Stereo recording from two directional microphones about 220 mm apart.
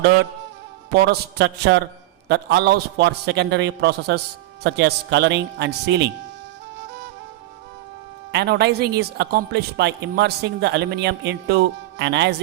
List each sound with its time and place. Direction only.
0.9 s a man's voice: 45° right (ahead or behind)
8.3 s a man's voice: 50° right (ahead or behind)